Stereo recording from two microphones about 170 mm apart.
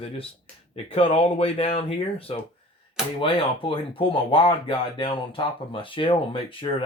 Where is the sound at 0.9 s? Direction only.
35° left (ahead or behind).